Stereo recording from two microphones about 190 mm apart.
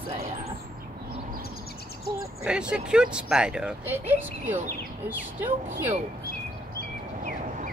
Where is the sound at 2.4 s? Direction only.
5° right (ahead or behind).